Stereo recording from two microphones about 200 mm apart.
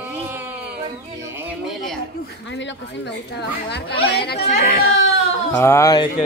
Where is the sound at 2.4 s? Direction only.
65° left (ahead or behind).